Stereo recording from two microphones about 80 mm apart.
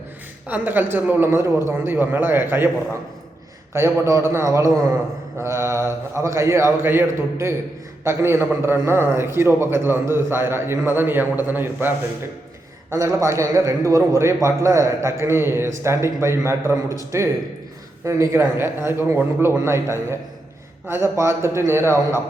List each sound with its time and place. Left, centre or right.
0.4 s a man's voice: right
3.7 s a man's voice: right
12.9 s a man's voice: right